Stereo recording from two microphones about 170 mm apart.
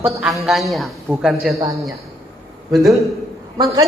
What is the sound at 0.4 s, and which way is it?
A woman's voice, centre (ahead or behind).